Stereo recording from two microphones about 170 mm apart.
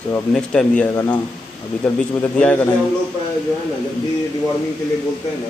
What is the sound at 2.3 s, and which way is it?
Speech, 10° left (ahead or behind).